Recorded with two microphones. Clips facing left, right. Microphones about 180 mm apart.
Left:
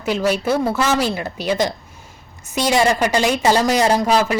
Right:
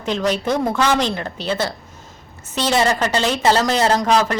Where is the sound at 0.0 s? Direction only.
10° left (ahead or behind).